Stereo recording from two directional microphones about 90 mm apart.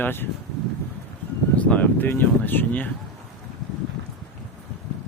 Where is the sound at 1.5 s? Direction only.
15° left (ahead or behind).